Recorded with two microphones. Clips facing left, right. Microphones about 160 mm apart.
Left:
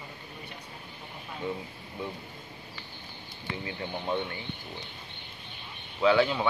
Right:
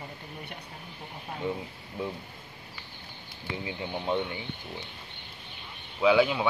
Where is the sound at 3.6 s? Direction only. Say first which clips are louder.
Right 2 dB; 15° right (ahead or behind).